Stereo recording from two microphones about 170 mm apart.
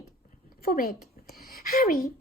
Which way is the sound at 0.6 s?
60° left (ahead or behind).